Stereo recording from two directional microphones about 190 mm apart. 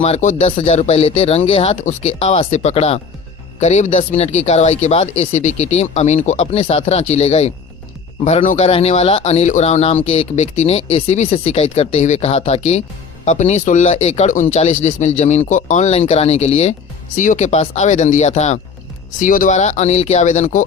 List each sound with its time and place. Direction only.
0.0 s a man's voice: 40° left (ahead or behind)